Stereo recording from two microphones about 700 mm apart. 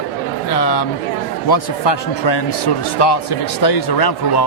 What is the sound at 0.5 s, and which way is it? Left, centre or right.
A man's voice, left.